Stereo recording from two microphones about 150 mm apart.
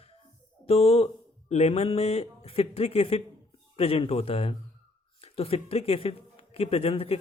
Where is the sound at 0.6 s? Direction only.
40° left (ahead or behind).